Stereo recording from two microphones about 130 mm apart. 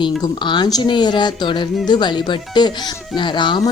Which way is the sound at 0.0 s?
35° left (ahead or behind).